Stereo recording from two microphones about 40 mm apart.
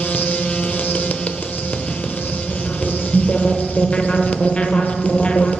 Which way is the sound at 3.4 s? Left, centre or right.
Left.